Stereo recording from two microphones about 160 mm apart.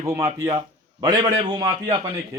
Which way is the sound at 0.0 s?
20° right (ahead or behind).